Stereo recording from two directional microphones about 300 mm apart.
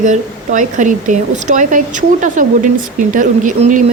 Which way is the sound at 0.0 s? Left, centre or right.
Right.